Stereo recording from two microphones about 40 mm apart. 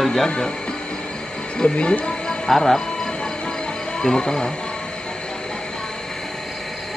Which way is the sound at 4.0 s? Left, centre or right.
Centre.